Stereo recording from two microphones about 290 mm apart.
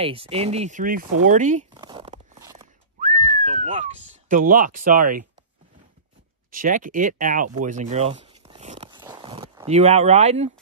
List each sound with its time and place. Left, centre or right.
0.0 s speech: centre
1.7 s a sound: centre
3.0 s whistling: right
3.3 s speech: right
6.5 s speech: right
7.6 s a sound: right